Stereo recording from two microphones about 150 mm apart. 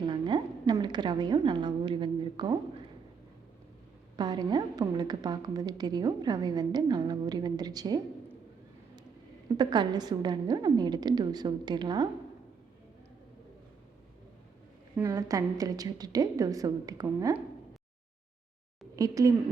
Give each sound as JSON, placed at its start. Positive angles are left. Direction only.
{"t": 0.0, "sound": "a sound", "side_deg": -30}
{"t": 0.7, "sound": "a woman's voice", "side_deg": -30}
{"t": 4.2, "sound": "a woman's voice", "side_deg": -30}
{"t": 9.6, "sound": "a woman's voice", "side_deg": -30}
{"t": 15.0, "sound": "a woman's voice", "side_deg": -25}
{"t": 18.9, "sound": "a woman's voice", "side_deg": -25}